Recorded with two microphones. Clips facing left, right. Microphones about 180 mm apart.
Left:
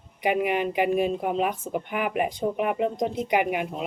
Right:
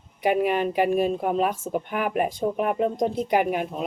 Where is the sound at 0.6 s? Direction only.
45° right (ahead or behind).